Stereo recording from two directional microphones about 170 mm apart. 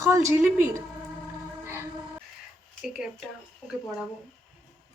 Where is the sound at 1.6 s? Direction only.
15° right (ahead or behind).